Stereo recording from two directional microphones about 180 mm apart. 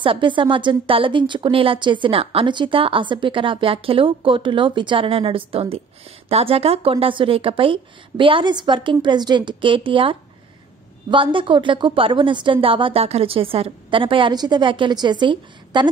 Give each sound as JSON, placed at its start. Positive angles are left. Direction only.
{"t": 0.0, "sound": "a woman's voice", "side_deg": -30}